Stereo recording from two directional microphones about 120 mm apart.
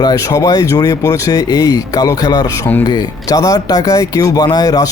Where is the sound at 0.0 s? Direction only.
30° left (ahead or behind).